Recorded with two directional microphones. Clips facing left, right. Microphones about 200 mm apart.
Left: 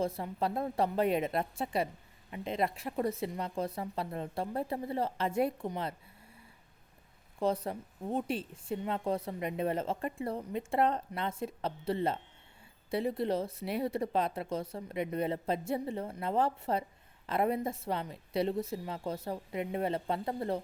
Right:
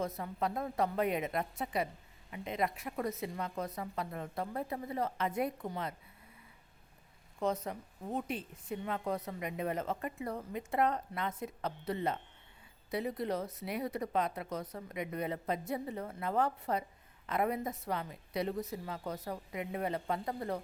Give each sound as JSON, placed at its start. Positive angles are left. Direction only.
{"t": 0.0, "sound": "speech", "side_deg": 30}
{"t": 7.3, "sound": "speech", "side_deg": 30}